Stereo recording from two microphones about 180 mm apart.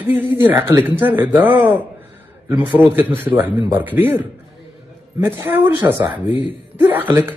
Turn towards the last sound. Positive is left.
turn(degrees=-10)  # may be behind; listen again after turning